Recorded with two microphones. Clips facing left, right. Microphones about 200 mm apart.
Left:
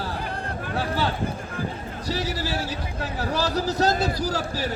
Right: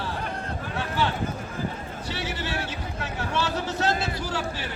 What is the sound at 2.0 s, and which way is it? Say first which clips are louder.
Speech: left 5 dB; 40° left (ahead or behind).